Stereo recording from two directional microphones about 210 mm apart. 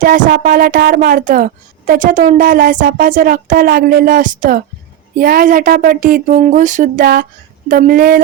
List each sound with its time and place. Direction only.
0.0 s speech: 40° right (ahead or behind)